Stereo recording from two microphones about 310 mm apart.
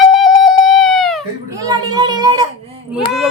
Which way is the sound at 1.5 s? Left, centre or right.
Centre.